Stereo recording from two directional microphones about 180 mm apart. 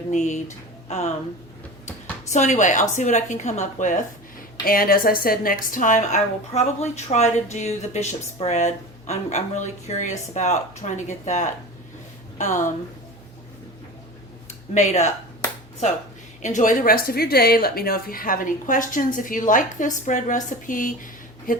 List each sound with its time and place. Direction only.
0.1 s speech: 40° left (ahead or behind)
2.3 s a woman's voice: 40° left (ahead or behind)
4.6 s a woman's voice: 55° left (ahead or behind)
14.7 s a woman's voice: 40° left (ahead or behind)
16.4 s a woman's voice: 40° left (ahead or behind)